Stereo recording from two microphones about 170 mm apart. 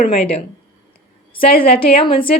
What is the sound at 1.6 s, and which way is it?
Speech, 35° left (ahead or behind).